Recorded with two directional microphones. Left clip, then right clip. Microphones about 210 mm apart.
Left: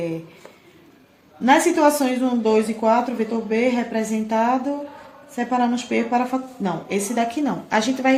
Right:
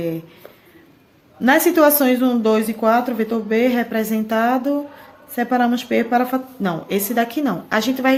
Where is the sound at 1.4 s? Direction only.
45° right (ahead or behind).